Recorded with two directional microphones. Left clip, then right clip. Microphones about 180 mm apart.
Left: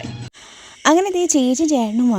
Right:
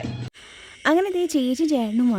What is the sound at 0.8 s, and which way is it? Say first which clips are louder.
A woman's voice: left 5 dB; 30° left (ahead or behind).